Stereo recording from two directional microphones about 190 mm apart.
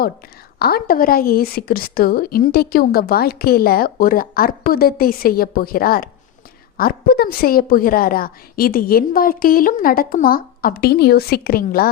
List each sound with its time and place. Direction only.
0.6 s a woman's voice: 50° left (ahead or behind)